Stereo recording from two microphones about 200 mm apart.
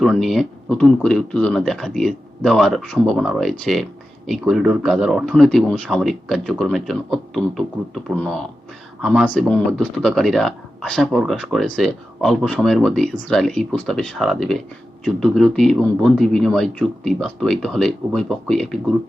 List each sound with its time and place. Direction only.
0.0 s speech: centre (ahead or behind)